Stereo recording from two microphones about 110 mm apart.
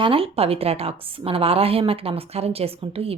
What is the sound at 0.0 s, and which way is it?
A woman's voice, 55° right (ahead or behind).